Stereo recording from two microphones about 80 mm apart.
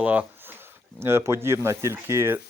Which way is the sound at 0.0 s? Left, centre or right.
Centre.